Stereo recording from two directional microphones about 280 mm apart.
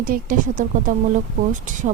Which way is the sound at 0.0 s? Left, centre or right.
Right.